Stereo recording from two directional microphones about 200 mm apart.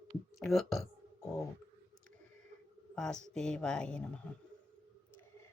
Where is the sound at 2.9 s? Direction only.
5° left (ahead or behind).